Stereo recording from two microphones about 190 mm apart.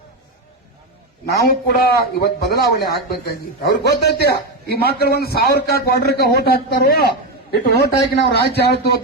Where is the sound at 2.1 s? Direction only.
55° left (ahead or behind).